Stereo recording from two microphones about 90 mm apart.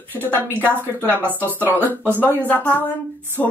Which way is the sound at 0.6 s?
25° right (ahead or behind).